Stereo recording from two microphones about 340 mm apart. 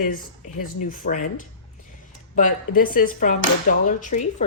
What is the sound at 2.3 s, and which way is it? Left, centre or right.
A woman's voice, left.